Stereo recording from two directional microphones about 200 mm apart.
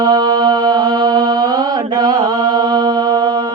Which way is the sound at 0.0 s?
20° right (ahead or behind).